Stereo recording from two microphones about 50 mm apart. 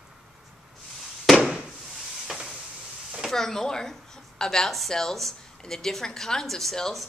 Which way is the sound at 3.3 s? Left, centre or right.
Centre.